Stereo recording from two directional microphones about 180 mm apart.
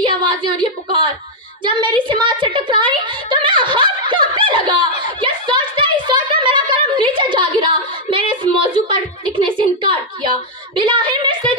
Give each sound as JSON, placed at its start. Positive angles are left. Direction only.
{"t": 0.0, "sound": "a woman's voice", "side_deg": -25}
{"t": 1.6, "sound": "a sound", "side_deg": -25}
{"t": 9.6, "sound": "a woman's voice", "side_deg": -25}